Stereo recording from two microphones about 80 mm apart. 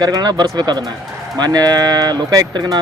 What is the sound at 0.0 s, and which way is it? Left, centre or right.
Speech, right.